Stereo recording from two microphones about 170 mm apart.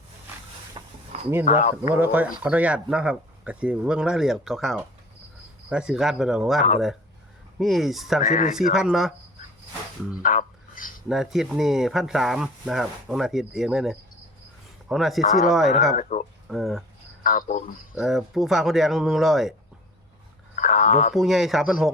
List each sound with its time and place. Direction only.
0.8 s a sound: 30° right (ahead or behind)
1.1 s a sound: 40° right (ahead or behind)
1.5 s speech: 45° left (ahead or behind)
1.9 s speech: 10° right (ahead or behind)
8.2 s speech: 45° left (ahead or behind)
8.7 s speech: 5° right (ahead or behind)
10.2 s a sound: 55° left (ahead or behind)
11.1 s speech: 5° right (ahead or behind)
16.0 s speech: 50° left (ahead or behind)
16.5 s speech: centre (ahead or behind)
17.2 s speech: 50° left (ahead or behind)
17.9 s speech: centre (ahead or behind)
20.6 s speech: 50° left (ahead or behind)
21.1 s speech: centre (ahead or behind)